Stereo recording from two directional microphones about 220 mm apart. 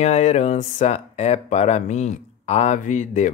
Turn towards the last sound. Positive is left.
turn(degrees=35)  # may be behind; listen again after turning